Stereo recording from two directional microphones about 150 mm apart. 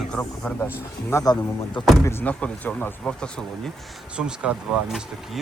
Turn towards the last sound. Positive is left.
turn(degrees=-5)  # may be behind; listen again after turning